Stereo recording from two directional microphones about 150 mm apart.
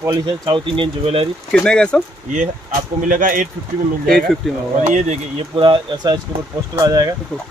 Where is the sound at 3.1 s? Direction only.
60° right (ahead or behind).